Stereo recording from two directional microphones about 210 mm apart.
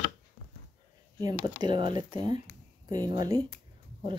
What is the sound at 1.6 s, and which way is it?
Speech, 20° right (ahead or behind).